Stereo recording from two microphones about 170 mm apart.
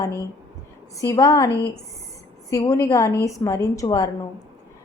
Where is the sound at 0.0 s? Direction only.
15° left (ahead or behind).